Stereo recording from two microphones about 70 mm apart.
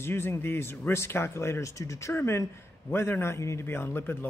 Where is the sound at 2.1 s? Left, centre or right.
Left.